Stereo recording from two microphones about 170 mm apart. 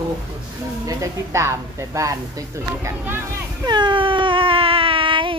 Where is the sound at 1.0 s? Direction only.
15° right (ahead or behind).